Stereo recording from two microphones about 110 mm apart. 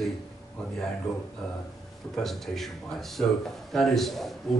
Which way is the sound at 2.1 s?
Centre (ahead or behind).